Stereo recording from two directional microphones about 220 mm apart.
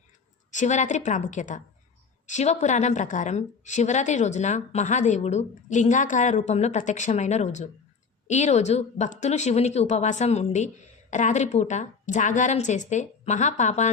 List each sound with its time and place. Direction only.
0.5 s a woman's voice: 35° left (ahead or behind)